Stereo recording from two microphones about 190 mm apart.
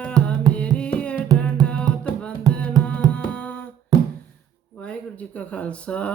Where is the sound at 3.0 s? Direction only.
20° right (ahead or behind).